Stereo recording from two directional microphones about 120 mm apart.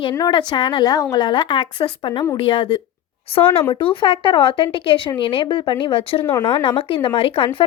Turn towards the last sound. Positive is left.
turn(degrees=50)  # may be behind; listen again after turning